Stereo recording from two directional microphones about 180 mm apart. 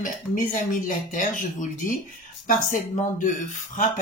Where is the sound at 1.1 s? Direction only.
45° left (ahead or behind).